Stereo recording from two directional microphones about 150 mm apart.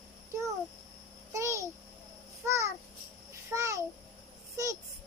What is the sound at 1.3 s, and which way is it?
Babbling, 20° right (ahead or behind).